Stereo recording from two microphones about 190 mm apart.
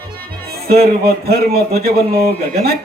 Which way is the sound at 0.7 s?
55° right (ahead or behind).